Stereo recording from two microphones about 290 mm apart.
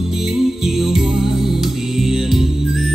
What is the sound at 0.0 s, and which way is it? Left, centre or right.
Music, centre.